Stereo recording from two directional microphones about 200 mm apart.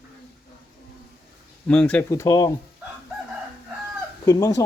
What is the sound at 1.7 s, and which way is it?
Speech, 5° left (ahead or behind).